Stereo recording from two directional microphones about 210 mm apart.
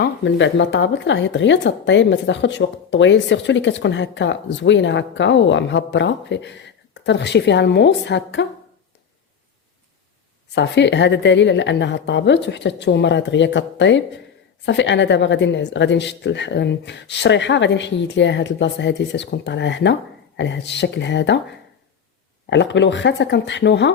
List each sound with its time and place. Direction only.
0.0 s speech: 60° left (ahead or behind)
10.5 s speech: 55° left (ahead or behind)
22.4 s speech: 60° left (ahead or behind)